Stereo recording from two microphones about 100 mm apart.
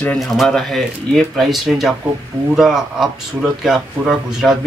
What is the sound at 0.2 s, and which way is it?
Speech, centre (ahead or behind).